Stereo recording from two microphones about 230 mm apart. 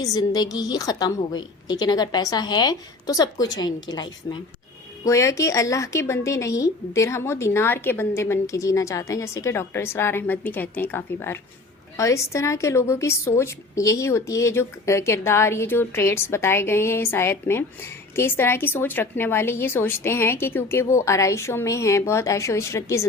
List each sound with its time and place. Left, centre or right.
0.0 s a woman's voice: centre